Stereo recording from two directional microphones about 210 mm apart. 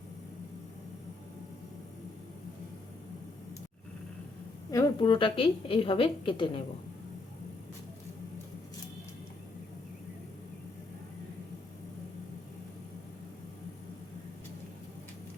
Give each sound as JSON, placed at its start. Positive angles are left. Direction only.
{"t": 4.7, "sound": "a woman's voice", "side_deg": 20}